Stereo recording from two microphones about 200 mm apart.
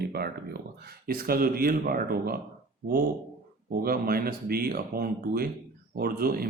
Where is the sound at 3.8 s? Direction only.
50° right (ahead or behind).